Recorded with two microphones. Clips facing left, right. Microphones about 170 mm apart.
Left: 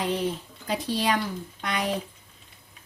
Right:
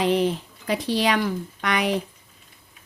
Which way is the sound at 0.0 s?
90° right.